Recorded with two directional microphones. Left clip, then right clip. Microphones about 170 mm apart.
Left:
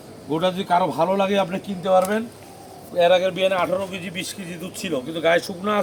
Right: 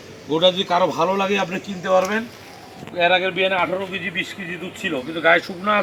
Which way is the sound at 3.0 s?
60° left (ahead or behind).